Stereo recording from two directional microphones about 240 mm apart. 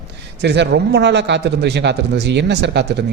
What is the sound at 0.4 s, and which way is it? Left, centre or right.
A man's voice, right.